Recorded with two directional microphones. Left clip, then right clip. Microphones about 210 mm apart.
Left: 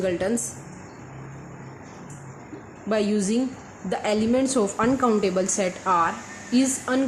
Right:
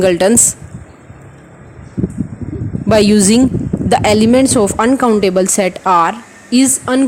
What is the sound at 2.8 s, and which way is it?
Speech, 50° right (ahead or behind).